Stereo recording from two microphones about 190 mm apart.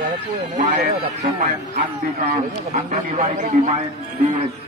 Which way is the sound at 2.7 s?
35° right (ahead or behind).